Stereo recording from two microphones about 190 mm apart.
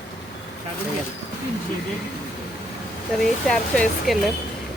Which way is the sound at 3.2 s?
5° left (ahead or behind).